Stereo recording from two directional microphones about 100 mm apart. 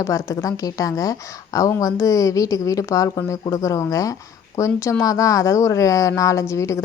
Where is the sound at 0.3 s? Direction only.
35° left (ahead or behind).